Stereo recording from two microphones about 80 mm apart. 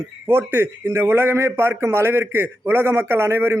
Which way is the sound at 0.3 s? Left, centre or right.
Right.